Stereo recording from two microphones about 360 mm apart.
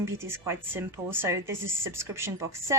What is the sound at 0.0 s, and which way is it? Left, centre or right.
A woman's voice, centre.